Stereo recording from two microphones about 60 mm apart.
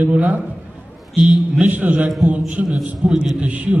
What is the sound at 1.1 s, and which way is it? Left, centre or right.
Speech, centre.